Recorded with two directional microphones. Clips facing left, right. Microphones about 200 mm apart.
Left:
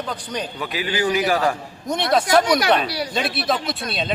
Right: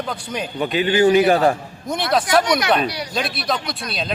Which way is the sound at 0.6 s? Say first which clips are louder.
Right 9 dB; 25° right (ahead or behind).